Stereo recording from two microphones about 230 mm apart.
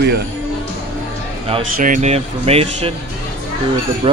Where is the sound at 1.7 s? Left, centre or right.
Right.